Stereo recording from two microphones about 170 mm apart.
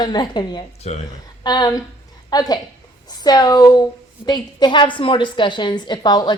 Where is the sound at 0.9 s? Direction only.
40° left (ahead or behind).